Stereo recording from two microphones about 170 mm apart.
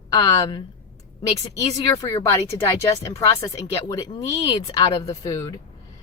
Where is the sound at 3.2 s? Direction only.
20° left (ahead or behind).